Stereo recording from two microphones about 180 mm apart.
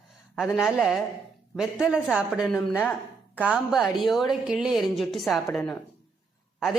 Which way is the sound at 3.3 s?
5° right (ahead or behind).